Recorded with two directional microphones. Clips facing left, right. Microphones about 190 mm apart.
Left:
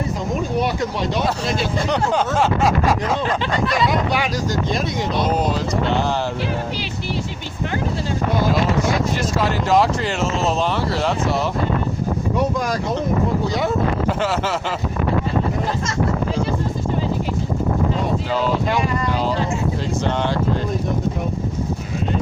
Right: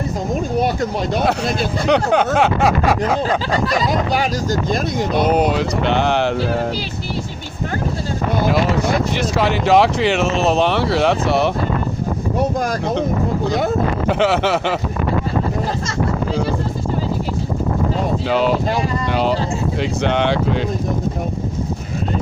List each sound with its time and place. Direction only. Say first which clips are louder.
0.6 s speech: right 2 dB; 50° right (ahead or behind)
3.8 s speech: right 1 dB; 40° right (ahead or behind)
4.7 s speech: right 3 dB; 55° right (ahead or behind)
8.4 s speech: right 4 dB; 65° right (ahead or behind)
12.5 s speech: right 2 dB; 50° right (ahead or behind)
14.1 s speech: right 5 dB; 70° right (ahead or behind)
18.3 s speech: right 5 dB; 70° right (ahead or behind)